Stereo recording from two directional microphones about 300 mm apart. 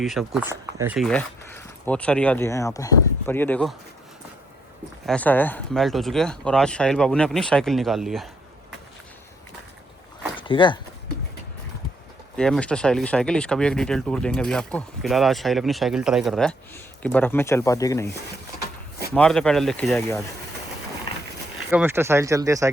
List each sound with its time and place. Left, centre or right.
0.0 s speech: centre
5.0 s speech: centre
10.4 s speech: centre
12.4 s speech: centre
19.1 s speech: centre
21.7 s speech: centre